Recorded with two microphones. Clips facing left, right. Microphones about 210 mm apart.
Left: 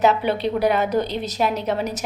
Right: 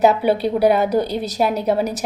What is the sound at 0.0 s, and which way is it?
A woman's voice, 10° right (ahead or behind).